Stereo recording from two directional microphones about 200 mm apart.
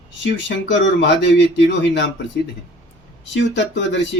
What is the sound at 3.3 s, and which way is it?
Speech, 65° left (ahead or behind).